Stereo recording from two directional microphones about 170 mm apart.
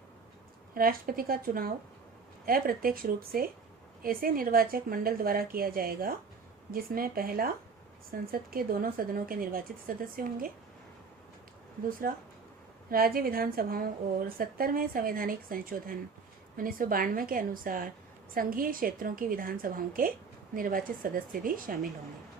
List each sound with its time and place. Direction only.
0.7 s a woman's voice: 60° right (ahead or behind)
11.9 s a woman's voice: 55° right (ahead or behind)